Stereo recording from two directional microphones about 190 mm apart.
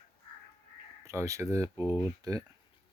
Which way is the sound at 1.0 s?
15° right (ahead or behind).